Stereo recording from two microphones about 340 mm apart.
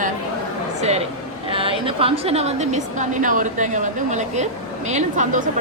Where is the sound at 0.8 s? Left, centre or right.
Centre.